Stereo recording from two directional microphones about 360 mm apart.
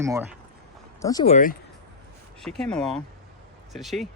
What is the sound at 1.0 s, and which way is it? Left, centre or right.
Speech, centre.